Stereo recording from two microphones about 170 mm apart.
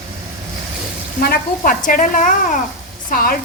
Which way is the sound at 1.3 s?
55° left (ahead or behind).